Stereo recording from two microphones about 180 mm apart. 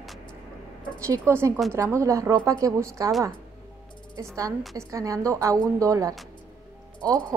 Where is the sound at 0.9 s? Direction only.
15° right (ahead or behind).